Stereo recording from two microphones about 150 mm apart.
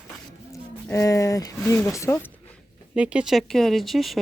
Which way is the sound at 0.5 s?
20° left (ahead or behind).